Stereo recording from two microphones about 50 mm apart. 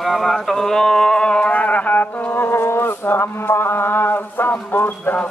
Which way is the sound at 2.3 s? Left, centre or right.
Left.